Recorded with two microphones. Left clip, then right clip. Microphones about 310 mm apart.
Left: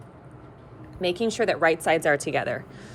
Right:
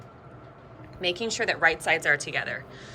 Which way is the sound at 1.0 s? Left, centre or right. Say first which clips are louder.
Left 3 dB; centre.